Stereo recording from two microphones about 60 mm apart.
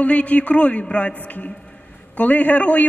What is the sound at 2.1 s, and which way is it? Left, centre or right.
Speech, left.